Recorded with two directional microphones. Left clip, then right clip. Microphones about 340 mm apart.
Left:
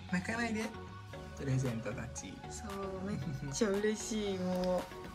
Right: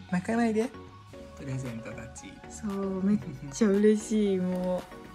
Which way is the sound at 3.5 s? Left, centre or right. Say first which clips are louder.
Right 9 dB; centre.